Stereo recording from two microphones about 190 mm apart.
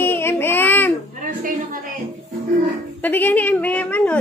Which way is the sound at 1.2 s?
45° right (ahead or behind).